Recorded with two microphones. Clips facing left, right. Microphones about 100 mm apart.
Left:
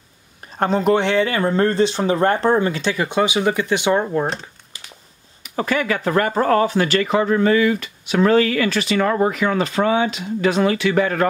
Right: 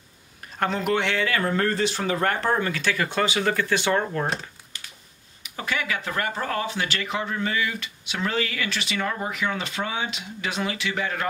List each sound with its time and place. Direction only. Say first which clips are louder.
0.6 s speech: left 7 dB; 30° left (ahead or behind)
5.4 s speech: left 8 dB; 45° left (ahead or behind); by 9.3 s 60° left (ahead or behind)
9.3 s speech: left 8 dB; 45° left (ahead or behind)